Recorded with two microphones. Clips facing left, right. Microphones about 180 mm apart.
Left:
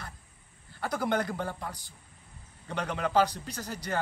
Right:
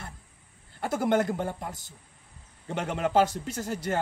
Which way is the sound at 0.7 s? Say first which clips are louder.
Right 4 dB; 25° right (ahead or behind).